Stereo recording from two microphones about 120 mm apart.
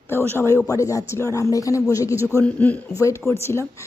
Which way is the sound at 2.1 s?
20° right (ahead or behind).